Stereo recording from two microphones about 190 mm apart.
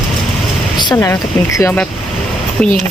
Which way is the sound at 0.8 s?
20° left (ahead or behind).